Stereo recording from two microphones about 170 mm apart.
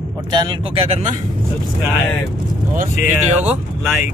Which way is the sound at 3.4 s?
10° right (ahead or behind).